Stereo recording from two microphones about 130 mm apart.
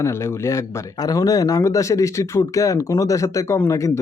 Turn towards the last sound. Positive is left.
turn(degrees=25)  # may be behind; listen again after turning